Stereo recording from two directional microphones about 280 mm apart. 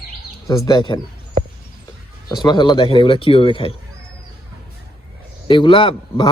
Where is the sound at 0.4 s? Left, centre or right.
Centre.